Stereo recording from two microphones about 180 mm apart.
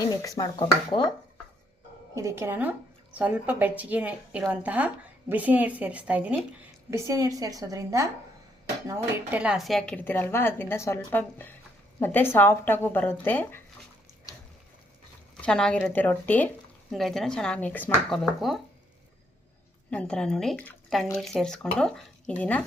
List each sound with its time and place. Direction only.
0.0 s speech: 20° left (ahead or behind)
2.1 s speech: 15° right (ahead or behind)
6.9 s a woman's voice: 20° right (ahead or behind)
8.9 s speech: 5° right (ahead or behind); by 13.6 s 10° left (ahead or behind)
15.4 s speech: 5° left (ahead or behind)
19.9 s speech: 5° left (ahead or behind)